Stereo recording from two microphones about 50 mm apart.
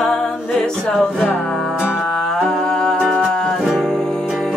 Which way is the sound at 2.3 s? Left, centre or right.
Centre.